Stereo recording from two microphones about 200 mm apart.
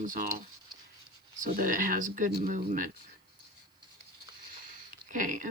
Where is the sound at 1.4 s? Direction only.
40° right (ahead or behind).